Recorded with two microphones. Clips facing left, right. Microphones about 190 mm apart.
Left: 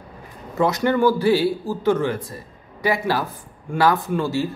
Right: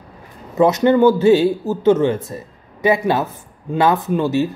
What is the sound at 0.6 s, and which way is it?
A man's voice, 20° right (ahead or behind).